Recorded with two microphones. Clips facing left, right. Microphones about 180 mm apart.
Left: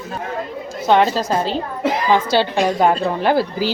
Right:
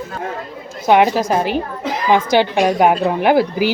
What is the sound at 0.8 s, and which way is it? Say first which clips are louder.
A woman's voice: right 2 dB; 15° right (ahead or behind).